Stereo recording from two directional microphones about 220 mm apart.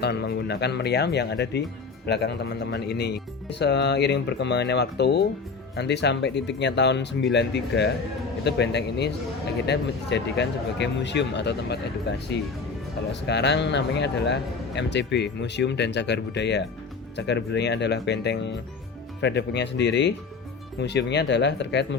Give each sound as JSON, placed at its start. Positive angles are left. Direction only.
{"t": 0.0, "sound": "speech", "side_deg": 50}